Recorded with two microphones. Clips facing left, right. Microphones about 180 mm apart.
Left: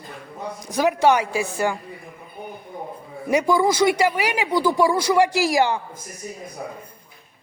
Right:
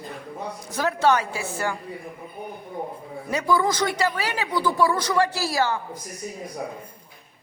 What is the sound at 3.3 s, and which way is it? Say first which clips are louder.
A man's voice: left 4 dB; 10° left (ahead or behind).